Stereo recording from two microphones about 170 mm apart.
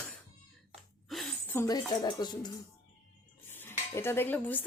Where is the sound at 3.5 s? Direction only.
15° left (ahead or behind).